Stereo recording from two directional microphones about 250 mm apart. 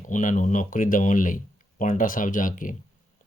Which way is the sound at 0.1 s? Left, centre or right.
Left.